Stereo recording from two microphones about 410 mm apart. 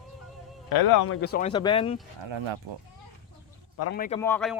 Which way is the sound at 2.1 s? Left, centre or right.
Right.